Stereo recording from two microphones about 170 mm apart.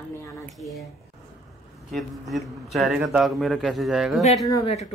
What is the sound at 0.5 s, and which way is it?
Speech, centre (ahead or behind).